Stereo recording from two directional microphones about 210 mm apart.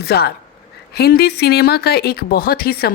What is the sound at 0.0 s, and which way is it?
Speech, 50° left (ahead or behind).